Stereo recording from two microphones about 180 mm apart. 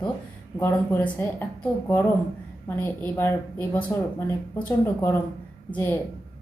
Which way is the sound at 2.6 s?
10° left (ahead or behind).